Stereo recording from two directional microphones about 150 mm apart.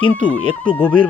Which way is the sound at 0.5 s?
10° left (ahead or behind).